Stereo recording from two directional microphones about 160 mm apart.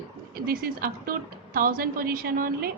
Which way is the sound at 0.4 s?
65° right (ahead or behind).